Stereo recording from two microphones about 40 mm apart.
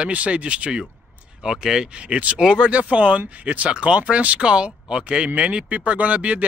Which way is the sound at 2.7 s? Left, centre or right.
Right.